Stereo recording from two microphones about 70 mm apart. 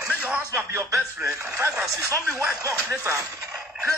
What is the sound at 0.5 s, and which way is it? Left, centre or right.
Speech, right.